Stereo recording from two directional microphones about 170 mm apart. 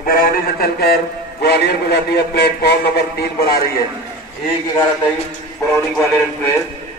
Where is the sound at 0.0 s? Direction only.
60° left (ahead or behind); by 2.7 s 75° left (ahead or behind).